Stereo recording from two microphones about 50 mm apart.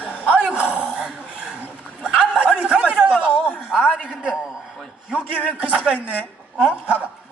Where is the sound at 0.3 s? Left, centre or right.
Right.